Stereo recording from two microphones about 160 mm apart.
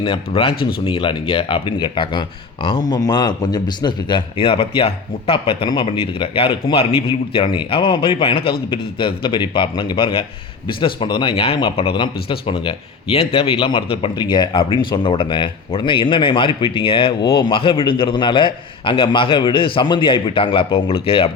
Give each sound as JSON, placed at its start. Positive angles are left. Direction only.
{"t": 0.0, "sound": "speech", "side_deg": 35}